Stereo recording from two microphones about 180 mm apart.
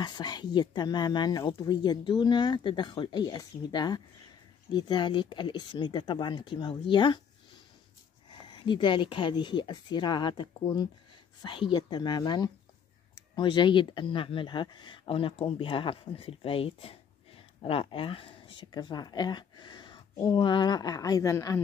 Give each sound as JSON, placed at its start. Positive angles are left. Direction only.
{"t": 0.0, "sound": "speech", "side_deg": 25}
{"t": 8.3, "sound": "speech", "side_deg": 25}